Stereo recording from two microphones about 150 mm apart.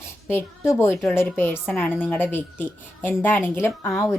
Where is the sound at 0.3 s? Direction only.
15° left (ahead or behind).